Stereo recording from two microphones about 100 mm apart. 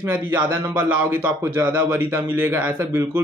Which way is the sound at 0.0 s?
20° right (ahead or behind).